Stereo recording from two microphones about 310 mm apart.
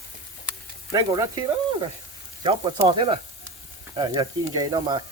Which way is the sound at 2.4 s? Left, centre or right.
Centre.